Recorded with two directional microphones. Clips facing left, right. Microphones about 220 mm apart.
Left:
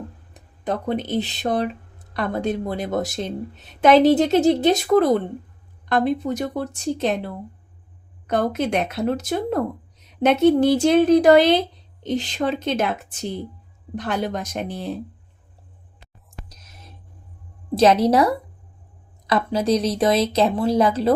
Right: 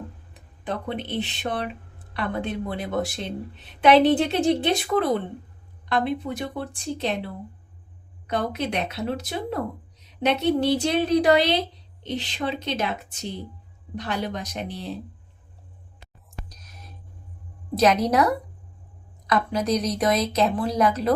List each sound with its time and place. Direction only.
0.6 s a woman's voice: 45° left (ahead or behind)
8.3 s a woman's voice: 50° left (ahead or behind)
13.9 s a woman's voice: 50° left (ahead or behind)
17.7 s a woman's voice: 30° left (ahead or behind)